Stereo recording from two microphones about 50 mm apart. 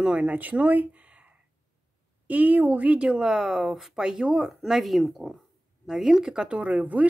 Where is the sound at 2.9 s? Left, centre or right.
Centre.